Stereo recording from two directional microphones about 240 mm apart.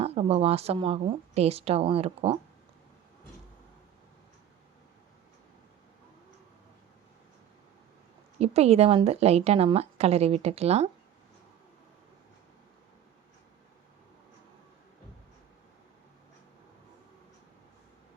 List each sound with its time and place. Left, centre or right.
0.0 s a woman's voice: right
8.4 s a woman's voice: right